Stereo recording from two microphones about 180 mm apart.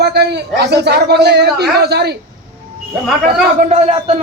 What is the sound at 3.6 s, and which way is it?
Speech, 35° right (ahead or behind).